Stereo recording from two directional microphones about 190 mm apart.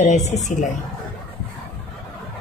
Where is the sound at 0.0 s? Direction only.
35° left (ahead or behind).